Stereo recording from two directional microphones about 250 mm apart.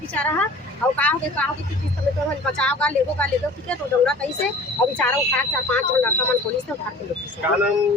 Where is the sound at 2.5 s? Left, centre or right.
Centre.